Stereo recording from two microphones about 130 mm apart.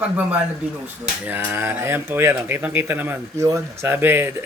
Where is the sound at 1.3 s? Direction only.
10° right (ahead or behind).